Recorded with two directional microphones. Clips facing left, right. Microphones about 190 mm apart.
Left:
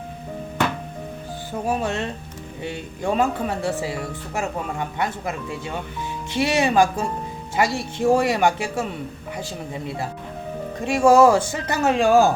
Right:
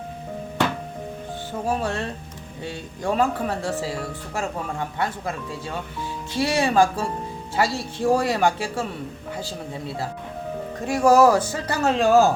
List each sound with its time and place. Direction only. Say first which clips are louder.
1.6 s speech: left 1 dB; 20° left (ahead or behind)
10.8 s speech: left 2 dB; 25° left (ahead or behind)